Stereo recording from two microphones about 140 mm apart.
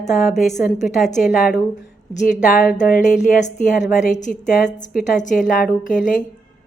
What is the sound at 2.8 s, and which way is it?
A woman's voice, 70° left (ahead or behind).